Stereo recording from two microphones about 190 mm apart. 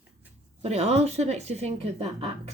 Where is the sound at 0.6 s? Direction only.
35° right (ahead or behind).